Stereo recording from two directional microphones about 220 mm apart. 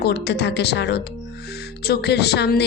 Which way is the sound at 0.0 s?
50° left (ahead or behind).